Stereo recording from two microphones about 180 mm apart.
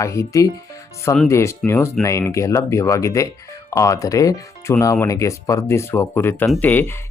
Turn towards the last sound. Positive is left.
turn(degrees=10)  # may be behind; listen again after turning